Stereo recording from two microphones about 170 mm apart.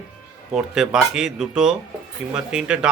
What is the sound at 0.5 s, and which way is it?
A man's voice, 5° right (ahead or behind).